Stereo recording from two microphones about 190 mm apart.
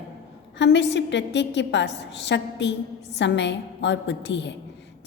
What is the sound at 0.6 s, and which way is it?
A woman's voice, 65° left (ahead or behind).